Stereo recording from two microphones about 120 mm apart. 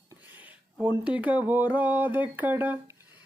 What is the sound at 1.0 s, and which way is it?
Speech, 10° right (ahead or behind).